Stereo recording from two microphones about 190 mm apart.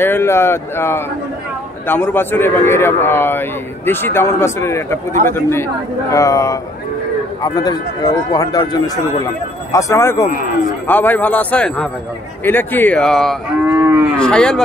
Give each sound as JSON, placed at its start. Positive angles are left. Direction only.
{"t": 0.0, "sound": "a man's voice", "side_deg": 10}
{"t": 10.2, "sound": "a man's voice", "side_deg": 45}
{"t": 10.9, "sound": "a man's voice", "side_deg": 10}
{"t": 13.7, "sound": "moo", "side_deg": -15}
{"t": 14.1, "sound": "moo", "side_deg": 5}